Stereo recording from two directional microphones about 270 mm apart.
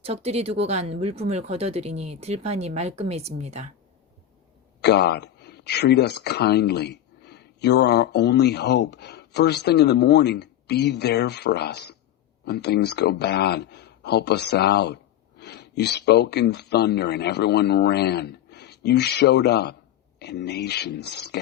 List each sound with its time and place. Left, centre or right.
0.0 s speech: right
4.8 s speech: left